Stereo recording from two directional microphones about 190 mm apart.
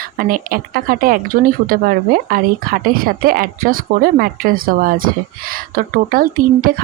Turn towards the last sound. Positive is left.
turn(degrees=-50)  # may be behind; listen again after turning